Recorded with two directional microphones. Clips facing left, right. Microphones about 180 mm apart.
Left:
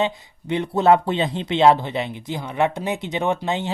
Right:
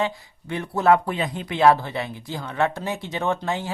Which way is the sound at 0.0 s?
20° left (ahead or behind).